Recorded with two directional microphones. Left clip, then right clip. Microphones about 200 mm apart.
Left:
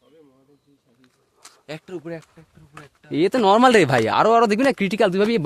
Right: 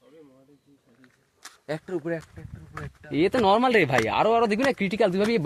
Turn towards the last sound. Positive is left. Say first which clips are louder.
# left 4 dB
turn(degrees=50)  # may be behind; listen again after turning